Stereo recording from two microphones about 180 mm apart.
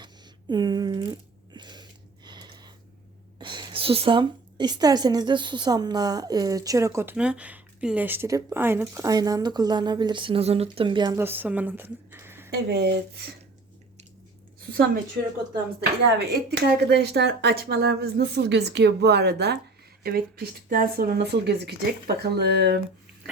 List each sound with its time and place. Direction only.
0.5 s a sound: 25° right (ahead or behind)
3.3 s a woman's voice: 25° right (ahead or behind)
11.2 s speech: 10° right (ahead or behind)
12.5 s speech: 65° right (ahead or behind)
15.2 s speech: 65° right (ahead or behind)